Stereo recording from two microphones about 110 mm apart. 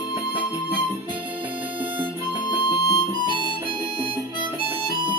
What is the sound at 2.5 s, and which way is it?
Music, 45° left (ahead or behind).